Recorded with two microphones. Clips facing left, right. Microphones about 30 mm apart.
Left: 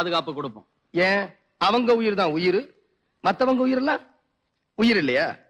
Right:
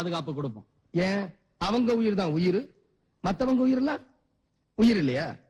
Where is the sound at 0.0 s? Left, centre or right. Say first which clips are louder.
Left 6 dB; left.